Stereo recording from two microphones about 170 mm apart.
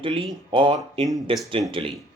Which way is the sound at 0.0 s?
30° right (ahead or behind).